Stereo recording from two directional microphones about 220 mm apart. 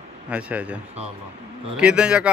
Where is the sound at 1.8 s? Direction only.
5° right (ahead or behind).